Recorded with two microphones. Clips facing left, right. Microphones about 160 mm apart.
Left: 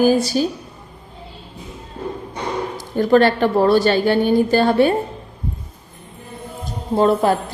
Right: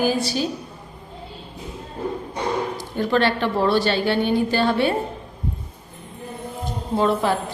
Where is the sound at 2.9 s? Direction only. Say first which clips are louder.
Left 6 dB; 45° left (ahead or behind).